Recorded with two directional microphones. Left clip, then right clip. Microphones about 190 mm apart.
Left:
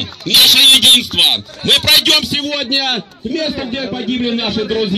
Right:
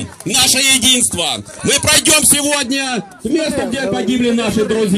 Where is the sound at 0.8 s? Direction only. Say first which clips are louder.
Left 5 dB; 70° right (ahead or behind).